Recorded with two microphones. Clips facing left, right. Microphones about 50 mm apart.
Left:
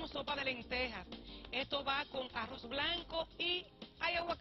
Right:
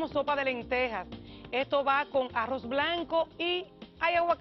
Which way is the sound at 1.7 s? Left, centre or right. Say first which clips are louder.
Right 12 dB; right.